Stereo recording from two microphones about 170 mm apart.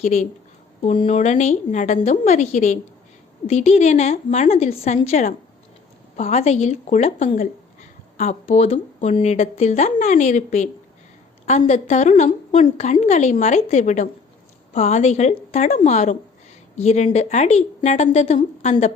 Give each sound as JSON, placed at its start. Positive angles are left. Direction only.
{"t": 0.0, "sound": "a woman's voice", "side_deg": 40}